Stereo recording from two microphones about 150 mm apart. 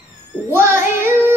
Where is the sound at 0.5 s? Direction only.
15° right (ahead or behind).